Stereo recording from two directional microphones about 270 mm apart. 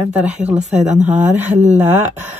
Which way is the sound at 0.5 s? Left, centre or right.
Right.